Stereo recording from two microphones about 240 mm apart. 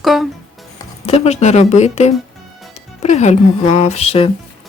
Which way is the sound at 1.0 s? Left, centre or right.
Left.